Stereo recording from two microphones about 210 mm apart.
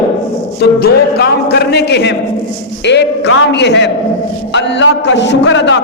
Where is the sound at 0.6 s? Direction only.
50° left (ahead or behind).